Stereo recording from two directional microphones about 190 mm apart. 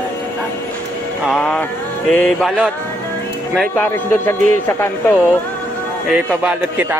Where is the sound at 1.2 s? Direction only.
5° left (ahead or behind).